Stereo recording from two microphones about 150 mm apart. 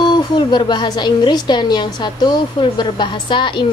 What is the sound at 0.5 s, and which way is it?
A woman's voice, 30° left (ahead or behind).